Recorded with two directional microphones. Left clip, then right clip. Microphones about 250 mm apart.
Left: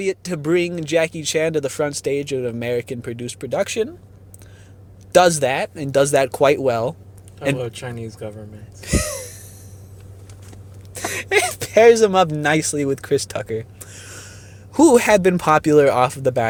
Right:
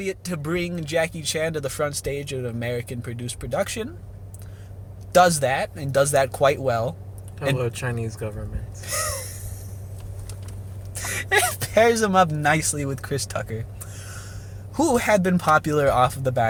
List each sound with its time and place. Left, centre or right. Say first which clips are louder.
0.0 s speech: left 6 dB; left
5.1 s speech: left 3 dB; left
7.6 s speech: right 1 dB; centre
8.8 s speech: left 4 dB; left
11.0 s speech: left 3 dB; left